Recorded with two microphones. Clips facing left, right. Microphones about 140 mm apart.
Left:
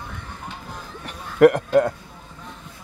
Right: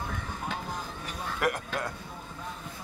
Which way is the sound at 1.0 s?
70° left (ahead or behind).